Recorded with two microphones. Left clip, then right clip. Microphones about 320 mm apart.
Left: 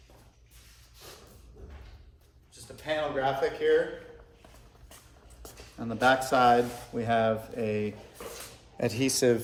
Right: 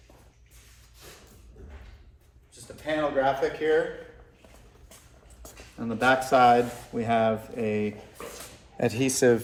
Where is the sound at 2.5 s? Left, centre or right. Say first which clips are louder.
Right 2 dB; centre.